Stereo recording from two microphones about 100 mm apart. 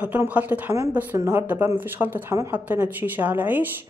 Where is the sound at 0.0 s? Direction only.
15° right (ahead or behind).